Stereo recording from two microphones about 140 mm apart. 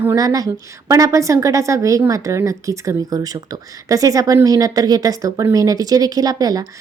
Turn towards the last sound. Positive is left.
turn(degrees=-25)  # may be behind; listen again after turning